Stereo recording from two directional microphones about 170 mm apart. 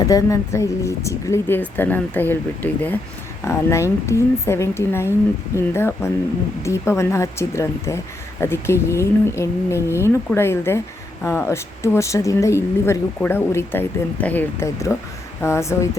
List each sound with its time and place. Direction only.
0.0 s speech: 20° left (ahead or behind)